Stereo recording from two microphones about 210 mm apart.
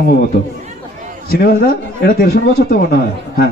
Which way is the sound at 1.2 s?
45° left (ahead or behind).